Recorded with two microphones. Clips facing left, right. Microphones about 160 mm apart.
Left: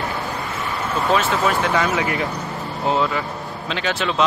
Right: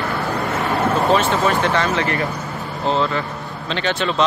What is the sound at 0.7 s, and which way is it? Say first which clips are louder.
Vehicle: right 8 dB; 55° right (ahead or behind).